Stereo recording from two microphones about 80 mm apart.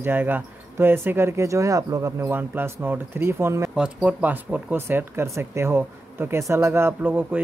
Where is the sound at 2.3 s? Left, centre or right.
Right.